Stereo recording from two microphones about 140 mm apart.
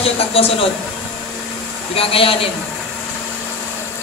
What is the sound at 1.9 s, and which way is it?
Speech, 40° left (ahead or behind).